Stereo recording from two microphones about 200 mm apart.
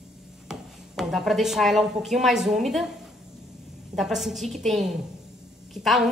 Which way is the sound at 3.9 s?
Centre (ahead or behind).